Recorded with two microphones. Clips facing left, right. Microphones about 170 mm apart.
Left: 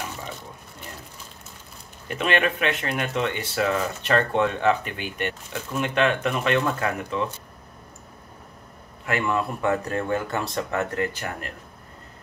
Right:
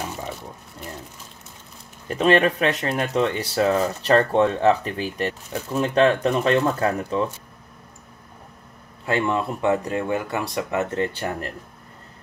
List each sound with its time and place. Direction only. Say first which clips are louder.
2.0 s speech: right 6 dB; 35° right (ahead or behind)
9.0 s speech: right 2 dB; 25° right (ahead or behind)